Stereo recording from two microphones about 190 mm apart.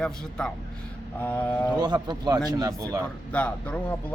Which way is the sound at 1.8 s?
20° right (ahead or behind).